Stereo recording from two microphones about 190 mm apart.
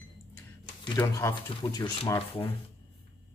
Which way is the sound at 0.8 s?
20° left (ahead or behind).